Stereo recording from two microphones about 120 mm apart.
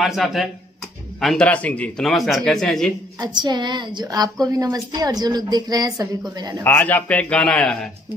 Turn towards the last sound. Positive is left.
turn(degrees=10)  # may be behind; listen again after turning